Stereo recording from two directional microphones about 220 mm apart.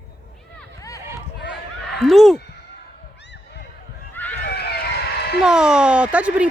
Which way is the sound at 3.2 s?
50° left (ahead or behind).